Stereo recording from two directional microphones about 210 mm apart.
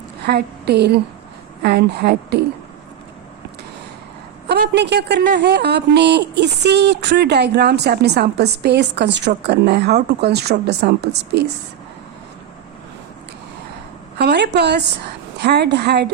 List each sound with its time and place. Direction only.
0.2 s a woman's voice: 50° right (ahead or behind)
4.4 s a woman's voice: 55° right (ahead or behind)
14.2 s speech: 50° right (ahead or behind)